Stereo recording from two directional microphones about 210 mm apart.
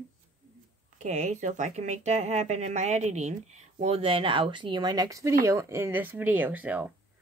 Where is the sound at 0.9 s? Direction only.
35° right (ahead or behind).